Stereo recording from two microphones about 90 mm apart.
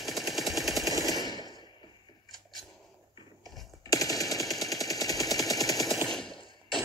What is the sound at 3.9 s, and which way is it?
Machine gun, 40° left (ahead or behind).